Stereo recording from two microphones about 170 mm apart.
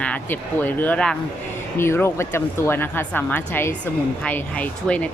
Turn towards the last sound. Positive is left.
turn(degrees=10)  # may be behind; listen again after turning